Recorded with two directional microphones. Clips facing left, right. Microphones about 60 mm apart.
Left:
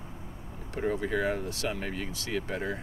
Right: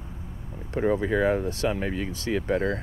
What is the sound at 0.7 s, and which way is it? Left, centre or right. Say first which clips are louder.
Speech: right 6 dB; right.